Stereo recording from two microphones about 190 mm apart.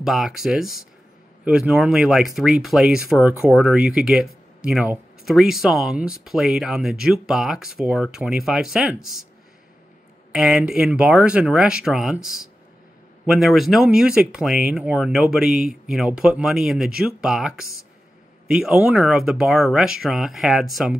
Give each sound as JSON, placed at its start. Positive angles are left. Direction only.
{"t": 0.0, "sound": "speech", "side_deg": 0}
{"t": 10.3, "sound": "speech", "side_deg": -5}